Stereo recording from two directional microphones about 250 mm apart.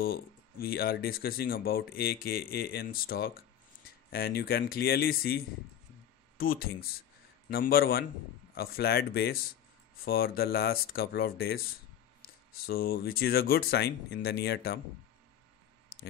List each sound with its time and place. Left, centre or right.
0.0 s speech: left
12.6 s speech: left